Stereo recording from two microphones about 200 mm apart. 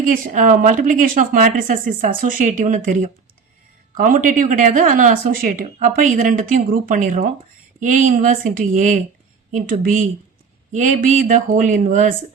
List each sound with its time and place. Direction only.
0.0 s speech: 40° right (ahead or behind)